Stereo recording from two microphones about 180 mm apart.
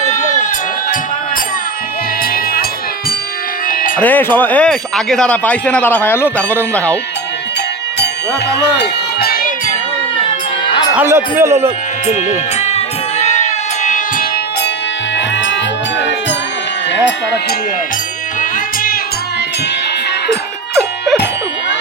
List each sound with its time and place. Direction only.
0.0 s a sound: 40° left (ahead or behind)
3.7 s music: 50° left (ahead or behind)
4.0 s speech: 10° left (ahead or behind)
8.8 s a sound: 60° left (ahead or behind)
10.9 s a man's voice: 15° right (ahead or behind)
12.0 s sheep: 40° left (ahead or behind)
18.3 s music: 50° left (ahead or behind)